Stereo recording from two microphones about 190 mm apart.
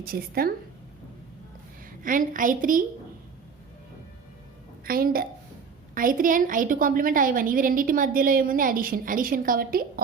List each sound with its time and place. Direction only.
0.0 s a woman's voice: 50° right (ahead or behind)
2.0 s a woman's voice: 45° right (ahead or behind)
4.9 s a woman's voice: 50° right (ahead or behind)